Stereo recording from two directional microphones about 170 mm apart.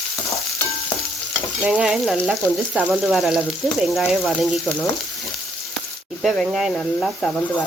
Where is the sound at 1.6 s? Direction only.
10° right (ahead or behind).